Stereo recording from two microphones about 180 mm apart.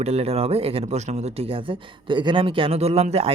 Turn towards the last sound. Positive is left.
turn(degrees=-35)  # may be behind; listen again after turning